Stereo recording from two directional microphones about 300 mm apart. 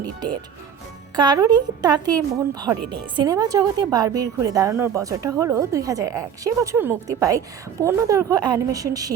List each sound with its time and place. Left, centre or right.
0.0 s a woman's voice: centre